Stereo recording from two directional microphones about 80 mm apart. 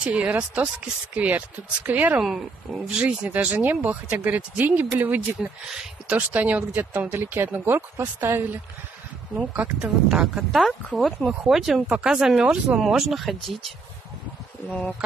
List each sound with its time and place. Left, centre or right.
0.0 s speech: centre
2.2 s speech: centre
3.0 s speech: centre
9.4 s speech: centre
14.7 s speech: centre